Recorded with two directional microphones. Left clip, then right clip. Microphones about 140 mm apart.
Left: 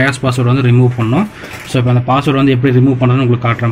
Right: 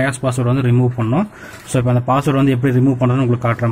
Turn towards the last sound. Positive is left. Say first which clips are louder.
# left 3 dB
turn(degrees=-55)  # may be behind; listen again after turning